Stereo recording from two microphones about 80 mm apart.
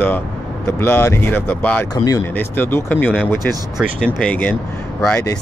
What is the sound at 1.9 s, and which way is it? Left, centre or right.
Speech, left.